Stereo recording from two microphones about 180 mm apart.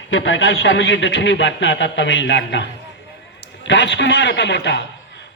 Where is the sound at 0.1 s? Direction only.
90° left.